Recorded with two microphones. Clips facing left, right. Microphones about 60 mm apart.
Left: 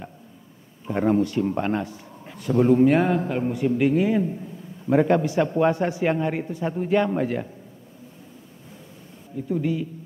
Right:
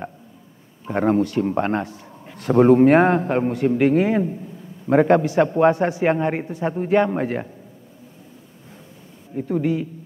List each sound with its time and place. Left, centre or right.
0.8 s a man's voice: right
9.3 s speech: right